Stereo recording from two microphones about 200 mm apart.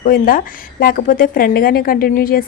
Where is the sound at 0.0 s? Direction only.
45° left (ahead or behind).